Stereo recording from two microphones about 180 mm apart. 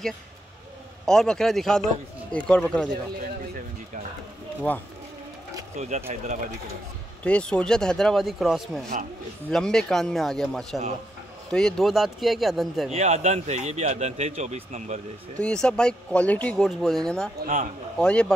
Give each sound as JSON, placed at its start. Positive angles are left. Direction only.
{"t": 1.0, "sound": "speech", "side_deg": 5}
{"t": 4.7, "sound": "speech", "side_deg": 10}
{"t": 5.8, "sound": "speech", "side_deg": -35}
{"t": 7.2, "sound": "speech", "side_deg": 5}
{"t": 12.9, "sound": "speech", "side_deg": -40}
{"t": 15.3, "sound": "speech", "side_deg": 5}